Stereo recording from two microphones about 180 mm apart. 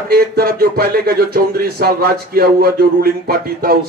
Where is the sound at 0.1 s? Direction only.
60° right (ahead or behind).